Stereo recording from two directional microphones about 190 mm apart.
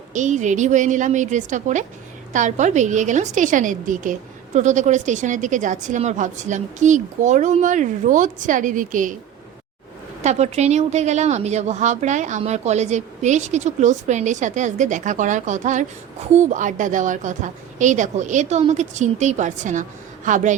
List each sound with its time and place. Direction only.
0.1 s a woman's voice: 40° right (ahead or behind)
10.2 s a woman's voice: 35° right (ahead or behind)